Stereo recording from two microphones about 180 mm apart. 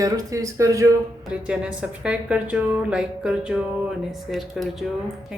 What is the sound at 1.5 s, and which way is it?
A woman's voice, 5° right (ahead or behind).